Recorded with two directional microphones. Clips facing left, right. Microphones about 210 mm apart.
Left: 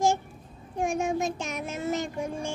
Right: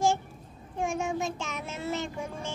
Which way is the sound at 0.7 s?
15° left (ahead or behind).